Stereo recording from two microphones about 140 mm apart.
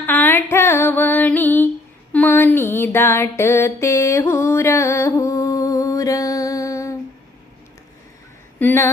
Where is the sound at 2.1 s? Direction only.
15° left (ahead or behind).